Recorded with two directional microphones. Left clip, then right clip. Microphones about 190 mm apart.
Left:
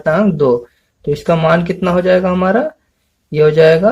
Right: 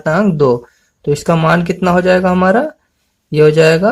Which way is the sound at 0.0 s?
35° right (ahead or behind).